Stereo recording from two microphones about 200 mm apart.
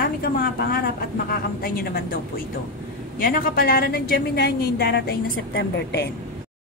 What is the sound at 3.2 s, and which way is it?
A woman's voice, 45° left (ahead or behind).